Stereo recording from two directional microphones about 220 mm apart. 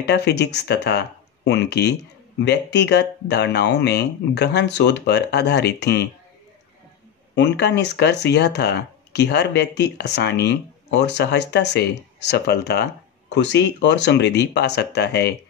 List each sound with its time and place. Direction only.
0.0 s speech: 50° left (ahead or behind)
7.3 s speech: 50° left (ahead or behind)